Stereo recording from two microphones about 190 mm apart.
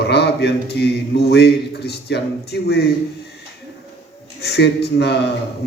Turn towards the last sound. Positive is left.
turn(degrees=60)  # may be behind; listen again after turning